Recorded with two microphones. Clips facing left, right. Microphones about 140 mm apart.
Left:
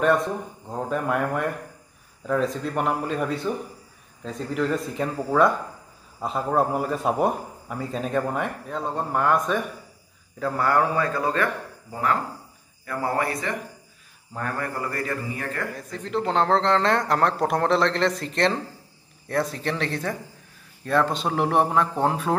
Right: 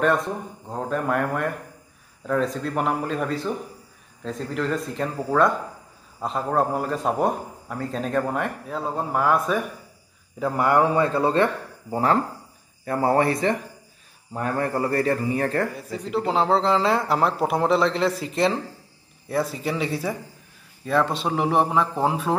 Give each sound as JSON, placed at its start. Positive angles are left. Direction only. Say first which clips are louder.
{"t": 0.0, "sound": "a man's voice", "louder": "left 1 dB", "side_deg": 0}
{"t": 10.4, "sound": "speech", "louder": "right 2 dB", "side_deg": -15}
{"t": 15.7, "sound": "a man's voice", "louder": "right 1 dB", "side_deg": -5}